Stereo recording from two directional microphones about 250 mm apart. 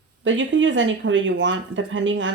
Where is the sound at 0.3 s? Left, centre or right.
Right.